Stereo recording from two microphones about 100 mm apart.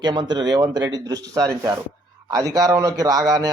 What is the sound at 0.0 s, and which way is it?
Speech, 45° right (ahead or behind).